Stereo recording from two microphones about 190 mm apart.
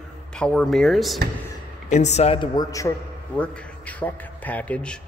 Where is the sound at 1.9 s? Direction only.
40° left (ahead or behind); by 2.9 s 20° left (ahead or behind).